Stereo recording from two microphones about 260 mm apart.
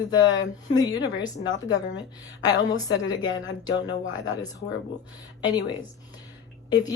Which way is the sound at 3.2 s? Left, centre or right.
Left.